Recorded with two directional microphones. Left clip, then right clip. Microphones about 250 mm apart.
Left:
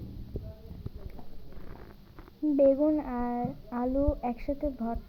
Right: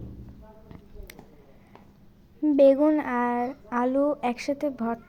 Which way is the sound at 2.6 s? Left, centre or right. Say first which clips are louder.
Right 5 dB; right.